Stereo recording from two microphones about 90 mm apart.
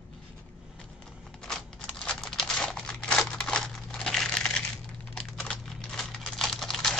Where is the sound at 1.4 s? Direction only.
10° left (ahead or behind).